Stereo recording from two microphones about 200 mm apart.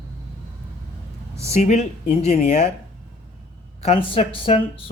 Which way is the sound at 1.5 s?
35° left (ahead or behind).